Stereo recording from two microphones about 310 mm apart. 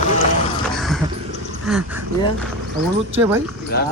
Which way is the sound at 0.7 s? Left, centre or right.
Centre.